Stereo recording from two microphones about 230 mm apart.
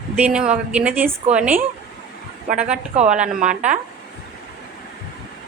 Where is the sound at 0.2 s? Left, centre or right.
Centre.